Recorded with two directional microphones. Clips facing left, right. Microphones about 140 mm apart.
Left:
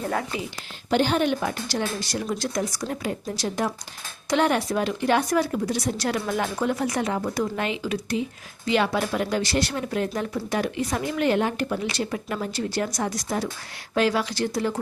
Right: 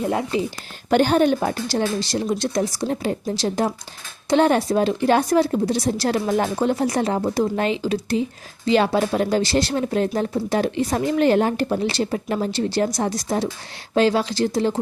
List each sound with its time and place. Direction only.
0.0 s speech: 20° right (ahead or behind)
0.9 s speech: 50° right (ahead or behind); by 14.8 s 25° right (ahead or behind)